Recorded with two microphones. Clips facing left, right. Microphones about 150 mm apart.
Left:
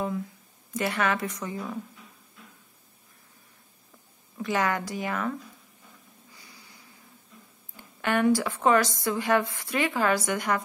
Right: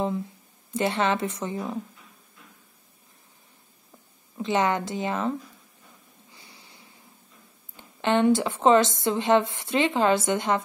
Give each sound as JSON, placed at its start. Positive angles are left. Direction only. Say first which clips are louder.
{"t": 0.7, "sound": "a woman's voice", "louder": "right 3 dB", "side_deg": -25}
{"t": 4.4, "sound": "a woman's voice", "louder": "right 3 dB", "side_deg": -25}
{"t": 6.3, "sound": "a sound", "louder": "right 2 dB", "side_deg": -25}
{"t": 7.7, "sound": "a woman's voice", "louder": "right 4 dB", "side_deg": -25}